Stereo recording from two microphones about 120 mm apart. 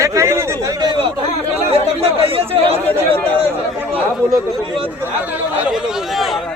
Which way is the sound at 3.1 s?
10° left (ahead or behind).